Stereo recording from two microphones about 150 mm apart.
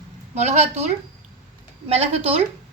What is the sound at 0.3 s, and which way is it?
Speech, 50° right (ahead or behind).